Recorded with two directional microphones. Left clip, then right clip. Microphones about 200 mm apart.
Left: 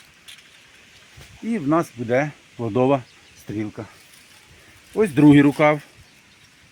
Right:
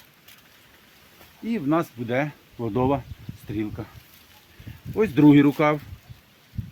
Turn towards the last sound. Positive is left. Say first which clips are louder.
# left 3 dB
turn(degrees=30)  # may be behind; listen again after turning